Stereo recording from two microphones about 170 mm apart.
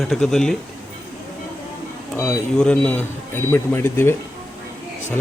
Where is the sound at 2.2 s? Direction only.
10° left (ahead or behind).